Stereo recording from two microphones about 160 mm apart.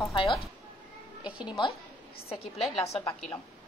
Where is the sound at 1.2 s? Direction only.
5° right (ahead or behind).